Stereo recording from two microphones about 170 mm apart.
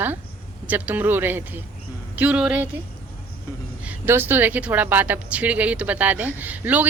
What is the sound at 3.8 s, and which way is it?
A woman's voice, 15° right (ahead or behind).